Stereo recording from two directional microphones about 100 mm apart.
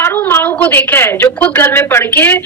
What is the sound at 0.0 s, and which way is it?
A woman's voice, 20° left (ahead or behind).